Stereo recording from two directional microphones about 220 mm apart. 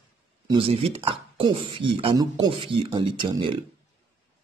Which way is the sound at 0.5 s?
25° right (ahead or behind).